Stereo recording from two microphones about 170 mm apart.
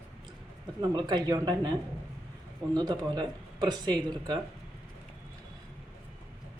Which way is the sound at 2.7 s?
25° right (ahead or behind).